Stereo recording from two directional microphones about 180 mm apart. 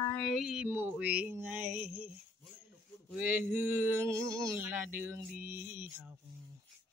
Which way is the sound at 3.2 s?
10° right (ahead or behind).